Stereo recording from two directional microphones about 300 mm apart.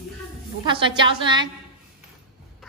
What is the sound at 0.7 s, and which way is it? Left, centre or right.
Speech, centre.